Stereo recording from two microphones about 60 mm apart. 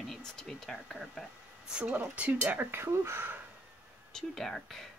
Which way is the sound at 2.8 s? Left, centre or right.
Right.